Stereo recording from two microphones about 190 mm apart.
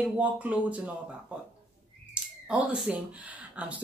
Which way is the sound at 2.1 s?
5° right (ahead or behind).